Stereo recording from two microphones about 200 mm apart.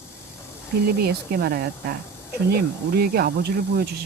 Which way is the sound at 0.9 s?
50° right (ahead or behind).